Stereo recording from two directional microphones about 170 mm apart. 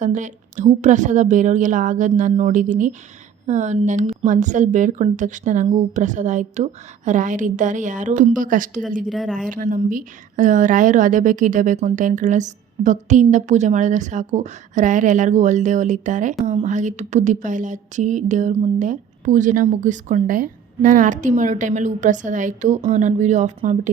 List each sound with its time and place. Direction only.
0.0 s a woman's voice: 45° right (ahead or behind)
9.0 s speech: centre (ahead or behind)
9.5 s a woman's voice: 50° right (ahead or behind)